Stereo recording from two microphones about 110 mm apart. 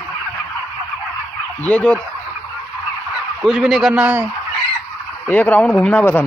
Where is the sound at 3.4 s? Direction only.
5° right (ahead or behind).